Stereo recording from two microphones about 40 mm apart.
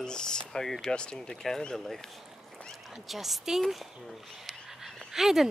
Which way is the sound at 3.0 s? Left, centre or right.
Centre.